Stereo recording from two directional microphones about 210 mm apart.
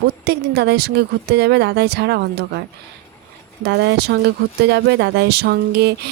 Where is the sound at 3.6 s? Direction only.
50° right (ahead or behind).